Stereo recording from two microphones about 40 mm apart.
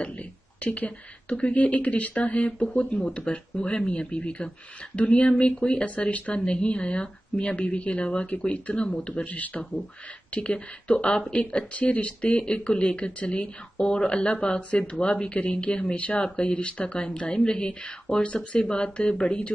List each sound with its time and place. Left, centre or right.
0.6 s speech: left
12.2 s speech: left